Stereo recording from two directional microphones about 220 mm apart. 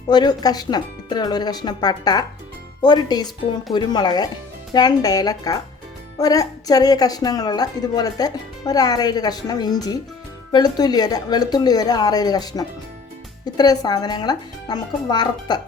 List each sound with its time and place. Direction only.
0.1 s a woman's voice: 20° left (ahead or behind)